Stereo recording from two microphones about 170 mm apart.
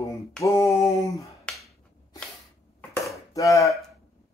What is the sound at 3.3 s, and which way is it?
Speech, 20° left (ahead or behind).